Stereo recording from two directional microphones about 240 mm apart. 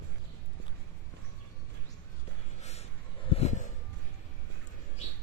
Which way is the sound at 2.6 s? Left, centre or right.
Left.